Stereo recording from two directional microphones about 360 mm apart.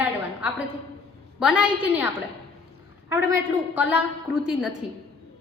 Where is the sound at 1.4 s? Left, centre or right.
Centre.